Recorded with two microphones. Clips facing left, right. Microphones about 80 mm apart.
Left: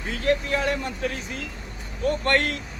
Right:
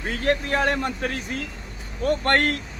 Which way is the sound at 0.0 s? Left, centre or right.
Right.